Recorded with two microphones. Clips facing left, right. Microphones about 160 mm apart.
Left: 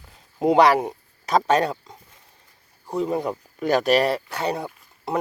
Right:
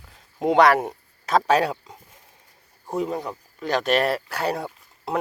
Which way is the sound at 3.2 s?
15° left (ahead or behind).